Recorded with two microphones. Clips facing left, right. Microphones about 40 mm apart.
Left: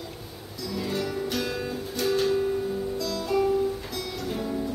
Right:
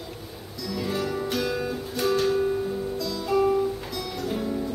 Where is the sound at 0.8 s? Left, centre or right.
Centre.